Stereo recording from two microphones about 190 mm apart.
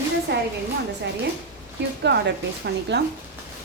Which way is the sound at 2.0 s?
60° right (ahead or behind).